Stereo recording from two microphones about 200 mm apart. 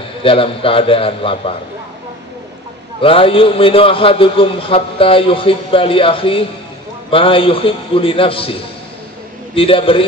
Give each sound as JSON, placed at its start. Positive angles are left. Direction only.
{"t": 0.2, "sound": "a man's voice", "side_deg": 25}
{"t": 3.0, "sound": "a man's voice", "side_deg": 25}
{"t": 9.6, "sound": "a man's voice", "side_deg": 25}